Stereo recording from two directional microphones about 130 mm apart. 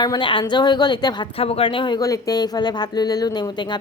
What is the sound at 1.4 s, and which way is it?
A woman's voice, 50° left (ahead or behind).